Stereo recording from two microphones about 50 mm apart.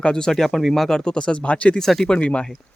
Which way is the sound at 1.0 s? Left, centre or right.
Centre.